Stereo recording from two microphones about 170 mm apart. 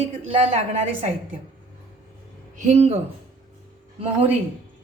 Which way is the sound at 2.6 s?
40° right (ahead or behind).